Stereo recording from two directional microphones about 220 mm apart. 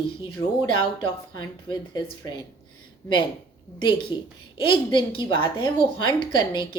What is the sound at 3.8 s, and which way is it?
A woman's voice, 20° left (ahead or behind).